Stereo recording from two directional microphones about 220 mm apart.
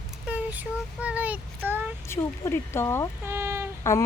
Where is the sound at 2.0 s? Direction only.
10° left (ahead or behind).